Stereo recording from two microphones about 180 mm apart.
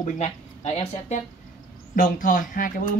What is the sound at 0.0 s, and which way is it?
Speech, 35° left (ahead or behind).